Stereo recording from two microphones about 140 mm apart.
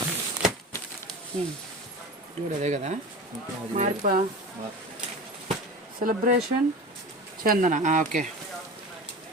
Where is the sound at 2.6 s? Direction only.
55° right (ahead or behind).